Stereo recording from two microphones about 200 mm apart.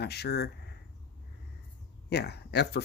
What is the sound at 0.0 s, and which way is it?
Speech, 55° left (ahead or behind).